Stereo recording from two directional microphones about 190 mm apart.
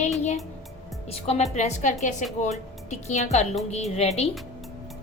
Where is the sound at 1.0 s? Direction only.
30° left (ahead or behind).